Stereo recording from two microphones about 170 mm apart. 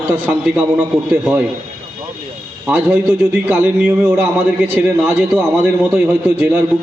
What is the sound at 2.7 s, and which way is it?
A man's voice, 10° right (ahead or behind).